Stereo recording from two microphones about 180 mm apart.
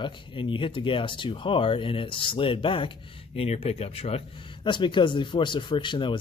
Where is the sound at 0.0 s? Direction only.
25° left (ahead or behind).